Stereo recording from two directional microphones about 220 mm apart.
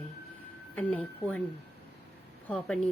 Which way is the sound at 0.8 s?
5° left (ahead or behind).